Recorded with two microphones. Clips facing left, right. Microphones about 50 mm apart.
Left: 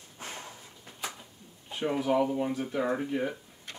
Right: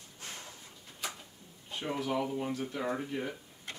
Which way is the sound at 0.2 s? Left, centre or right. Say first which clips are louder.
Left 5 dB; left.